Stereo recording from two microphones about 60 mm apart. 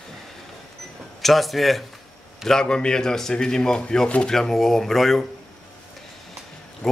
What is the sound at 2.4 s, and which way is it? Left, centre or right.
Speech, centre.